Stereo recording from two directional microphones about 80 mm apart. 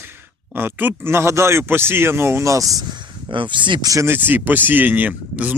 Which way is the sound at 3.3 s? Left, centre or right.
Right.